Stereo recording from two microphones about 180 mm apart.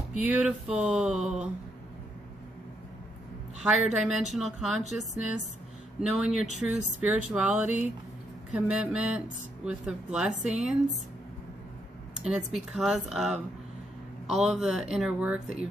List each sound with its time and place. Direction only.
0.2 s speech: 5° right (ahead or behind)
3.6 s speech: 5° right (ahead or behind)
5.9 s speech: 5° right (ahead or behind)
10.3 s a woman's voice: 40° right (ahead or behind)
10.6 s speech: 5° right (ahead or behind)
12.2 s speech: 5° right (ahead or behind)